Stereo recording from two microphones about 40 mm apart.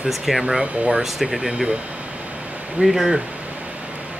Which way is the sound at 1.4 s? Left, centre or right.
Centre.